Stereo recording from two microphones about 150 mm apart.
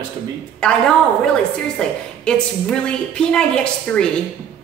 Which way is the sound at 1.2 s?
5° left (ahead or behind).